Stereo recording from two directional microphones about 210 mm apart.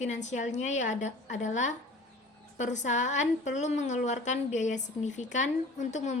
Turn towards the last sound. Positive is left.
turn(degrees=35)  # may be behind; listen again after turning